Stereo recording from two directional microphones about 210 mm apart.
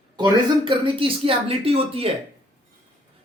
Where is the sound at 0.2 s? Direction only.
25° right (ahead or behind).